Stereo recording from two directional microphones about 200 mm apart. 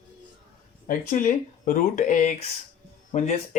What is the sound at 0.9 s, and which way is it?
Speech, 45° left (ahead or behind).